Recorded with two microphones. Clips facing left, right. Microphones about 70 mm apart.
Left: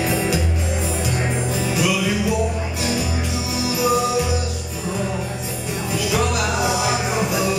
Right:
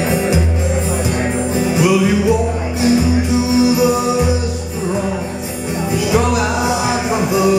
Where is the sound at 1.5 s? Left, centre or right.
Right.